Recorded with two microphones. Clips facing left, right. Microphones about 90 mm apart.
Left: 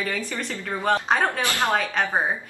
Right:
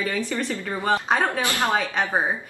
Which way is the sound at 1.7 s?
5° right (ahead or behind).